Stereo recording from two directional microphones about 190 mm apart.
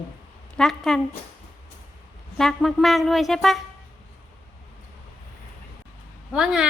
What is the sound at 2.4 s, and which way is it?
Speech, centre (ahead or behind).